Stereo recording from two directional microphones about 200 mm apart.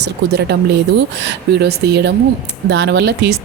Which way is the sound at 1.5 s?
55° right (ahead or behind).